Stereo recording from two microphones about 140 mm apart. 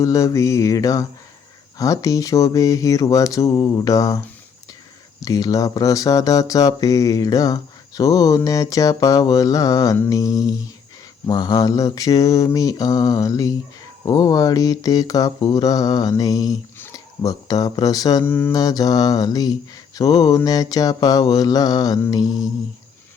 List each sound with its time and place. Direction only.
0.0 s speech: 25° left (ahead or behind)
5.2 s speech: 25° left (ahead or behind)
18.5 s speech: 25° left (ahead or behind)